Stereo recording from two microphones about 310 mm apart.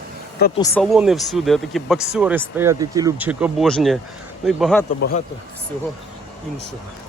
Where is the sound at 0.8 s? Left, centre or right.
Centre.